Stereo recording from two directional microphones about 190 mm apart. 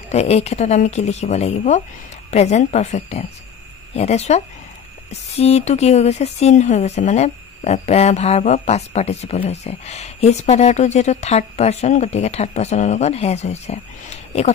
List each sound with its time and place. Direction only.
0.1 s speech: 35° left (ahead or behind)